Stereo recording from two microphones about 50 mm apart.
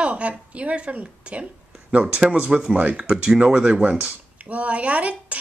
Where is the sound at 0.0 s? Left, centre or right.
Right.